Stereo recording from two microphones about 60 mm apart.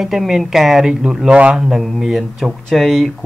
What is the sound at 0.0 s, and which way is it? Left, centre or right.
Speech, centre.